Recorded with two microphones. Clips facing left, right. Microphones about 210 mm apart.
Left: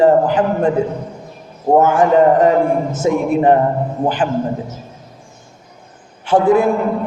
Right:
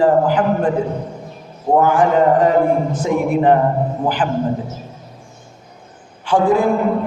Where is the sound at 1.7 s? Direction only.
25° left (ahead or behind).